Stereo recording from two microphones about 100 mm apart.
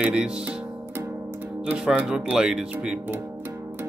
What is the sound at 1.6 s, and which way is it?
Speech, 10° right (ahead or behind).